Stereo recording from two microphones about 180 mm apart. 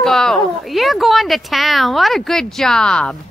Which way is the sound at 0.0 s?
Centre (ahead or behind).